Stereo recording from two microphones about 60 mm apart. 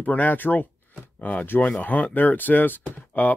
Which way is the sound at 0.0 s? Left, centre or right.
Left.